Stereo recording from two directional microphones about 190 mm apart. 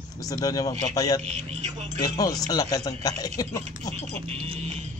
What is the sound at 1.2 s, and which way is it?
Speech, 35° right (ahead or behind).